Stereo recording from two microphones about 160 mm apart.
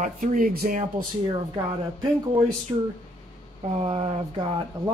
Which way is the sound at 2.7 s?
20° right (ahead or behind).